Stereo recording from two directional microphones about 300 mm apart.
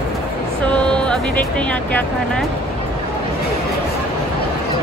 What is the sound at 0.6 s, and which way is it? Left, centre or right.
Speech, centre.